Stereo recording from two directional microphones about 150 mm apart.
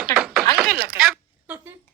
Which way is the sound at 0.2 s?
Centre (ahead or behind).